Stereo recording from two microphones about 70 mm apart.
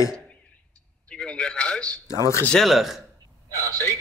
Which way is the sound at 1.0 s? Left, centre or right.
Centre.